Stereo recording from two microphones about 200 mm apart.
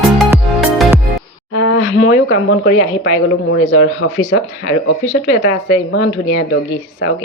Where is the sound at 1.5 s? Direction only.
70° left (ahead or behind); by 3.2 s 45° left (ahead or behind).